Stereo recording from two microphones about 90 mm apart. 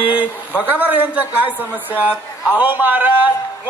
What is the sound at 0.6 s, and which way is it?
A man's voice, 15° right (ahead or behind).